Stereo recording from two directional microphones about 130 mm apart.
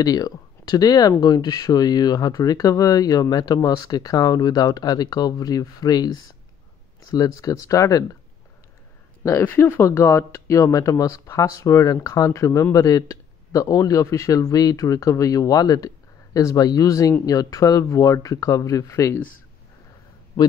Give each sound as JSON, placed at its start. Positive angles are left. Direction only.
{"t": 0.0, "sound": "speech", "side_deg": 30}
{"t": 9.2, "sound": "speech", "side_deg": 20}